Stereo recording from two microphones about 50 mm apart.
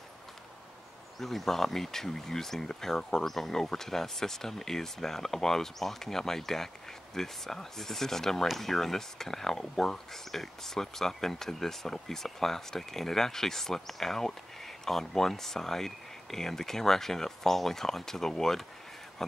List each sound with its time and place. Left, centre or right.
1.2 s speech: centre